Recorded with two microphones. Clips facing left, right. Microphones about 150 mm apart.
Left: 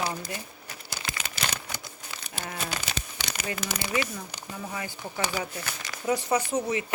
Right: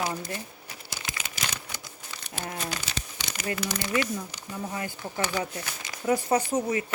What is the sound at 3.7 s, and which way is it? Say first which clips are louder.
Speech: right 1 dB; 10° left (ahead or behind).